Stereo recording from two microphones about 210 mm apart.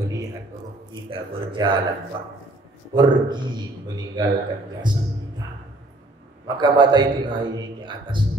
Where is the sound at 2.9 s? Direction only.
20° right (ahead or behind).